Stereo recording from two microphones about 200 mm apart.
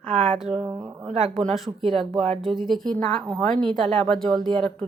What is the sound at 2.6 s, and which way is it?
A woman's voice, centre (ahead or behind).